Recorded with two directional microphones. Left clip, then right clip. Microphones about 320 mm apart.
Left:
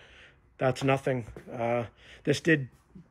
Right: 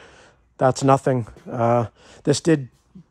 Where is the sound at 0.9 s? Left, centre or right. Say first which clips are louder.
Right 9 dB; right.